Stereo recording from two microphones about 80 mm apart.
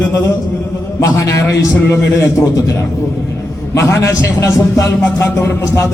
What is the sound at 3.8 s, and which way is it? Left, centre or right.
A man's voice, left.